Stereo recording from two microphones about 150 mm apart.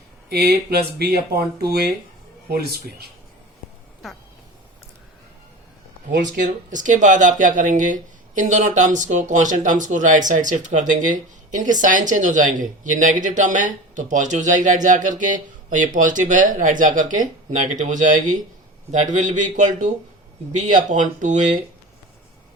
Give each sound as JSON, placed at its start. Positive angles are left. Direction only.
{"t": 0.3, "sound": "speech", "side_deg": -90}
{"t": 6.4, "sound": "speech", "side_deg": -55}